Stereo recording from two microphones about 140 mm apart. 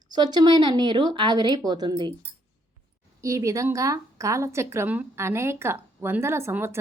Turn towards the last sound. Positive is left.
turn(degrees=-15)  # may be behind; listen again after turning